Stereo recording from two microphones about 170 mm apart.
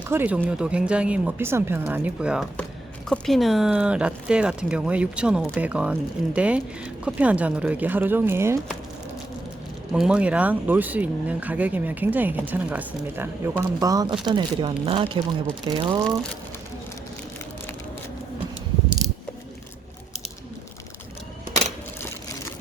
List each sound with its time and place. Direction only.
0.0 s speech: 10° right (ahead or behind)
9.9 s speech: 5° right (ahead or behind); by 16.0 s 30° right (ahead or behind)